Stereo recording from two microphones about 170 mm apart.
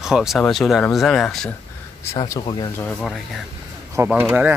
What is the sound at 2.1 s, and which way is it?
Speech, 25° left (ahead or behind).